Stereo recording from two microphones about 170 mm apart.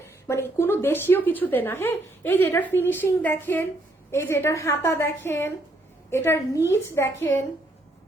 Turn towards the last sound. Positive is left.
turn(degrees=15)  # may be behind; listen again after turning